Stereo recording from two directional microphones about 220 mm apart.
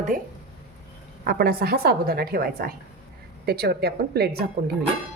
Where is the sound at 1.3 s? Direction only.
45° right (ahead or behind).